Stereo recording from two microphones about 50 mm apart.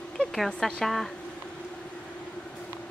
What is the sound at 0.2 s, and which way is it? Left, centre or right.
Speech, centre.